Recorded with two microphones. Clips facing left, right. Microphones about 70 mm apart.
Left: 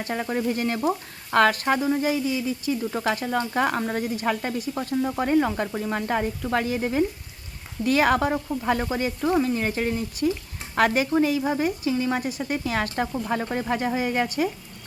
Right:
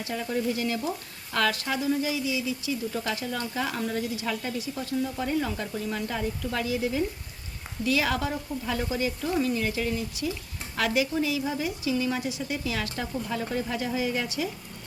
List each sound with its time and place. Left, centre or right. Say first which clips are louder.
0.0 s speech: left 3 dB; left